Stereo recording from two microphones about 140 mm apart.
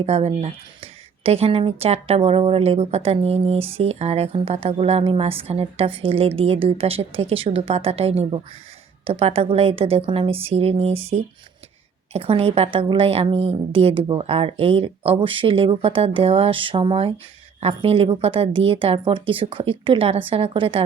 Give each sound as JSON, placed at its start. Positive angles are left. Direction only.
{"t": 0.0, "sound": "a woman's voice", "side_deg": -50}